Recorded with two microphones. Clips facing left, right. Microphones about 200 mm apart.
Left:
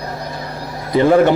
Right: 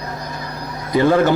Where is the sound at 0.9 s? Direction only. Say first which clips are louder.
Left 3 dB; 25° left (ahead or behind).